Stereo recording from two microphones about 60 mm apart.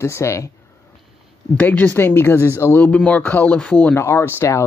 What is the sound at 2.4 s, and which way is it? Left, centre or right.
Speech, left.